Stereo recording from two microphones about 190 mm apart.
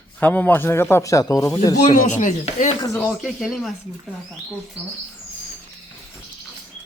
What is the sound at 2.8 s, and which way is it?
Speech, 15° left (ahead or behind).